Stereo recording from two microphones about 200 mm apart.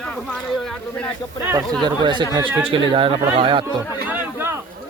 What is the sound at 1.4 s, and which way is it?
Speech, 15° right (ahead or behind).